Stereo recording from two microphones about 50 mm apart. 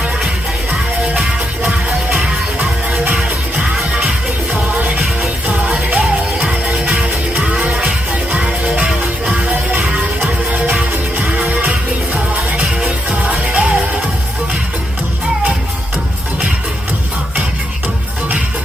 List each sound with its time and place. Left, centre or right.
5.6 s music: right
9.5 s music: right
11.3 s music: right
12.5 s music: right